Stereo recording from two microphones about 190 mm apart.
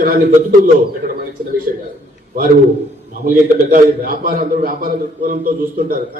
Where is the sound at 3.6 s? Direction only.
50° right (ahead or behind).